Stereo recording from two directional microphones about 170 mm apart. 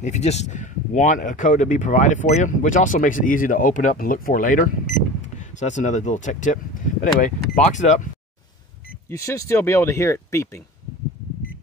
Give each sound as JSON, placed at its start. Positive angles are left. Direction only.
{"t": 0.0, "sound": "speech", "side_deg": 40}
{"t": 9.1, "sound": "speech", "side_deg": 15}